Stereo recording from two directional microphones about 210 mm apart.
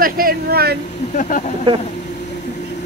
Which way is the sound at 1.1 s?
35° left (ahead or behind).